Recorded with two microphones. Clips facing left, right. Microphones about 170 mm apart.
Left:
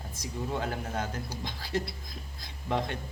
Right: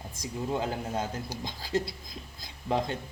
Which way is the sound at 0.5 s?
25° right (ahead or behind).